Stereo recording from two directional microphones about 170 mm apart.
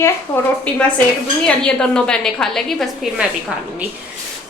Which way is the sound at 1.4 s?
5° left (ahead or behind).